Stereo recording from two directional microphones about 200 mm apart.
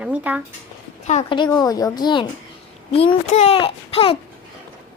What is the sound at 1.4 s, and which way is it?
A child's voice, 20° left (ahead or behind).